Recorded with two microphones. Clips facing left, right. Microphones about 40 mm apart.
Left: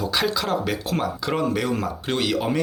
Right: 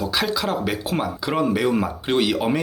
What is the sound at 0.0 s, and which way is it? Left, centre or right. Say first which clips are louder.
Speech: right 1 dB; centre.